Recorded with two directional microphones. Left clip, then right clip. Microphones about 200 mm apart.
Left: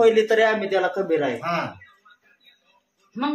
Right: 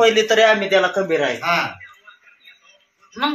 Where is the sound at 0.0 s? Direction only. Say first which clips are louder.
Right 3 dB; 35° right (ahead or behind).